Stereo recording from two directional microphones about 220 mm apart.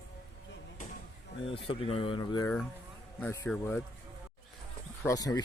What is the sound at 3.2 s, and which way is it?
Speech, 10° left (ahead or behind).